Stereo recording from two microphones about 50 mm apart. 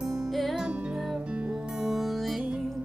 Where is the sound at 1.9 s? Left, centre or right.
Centre.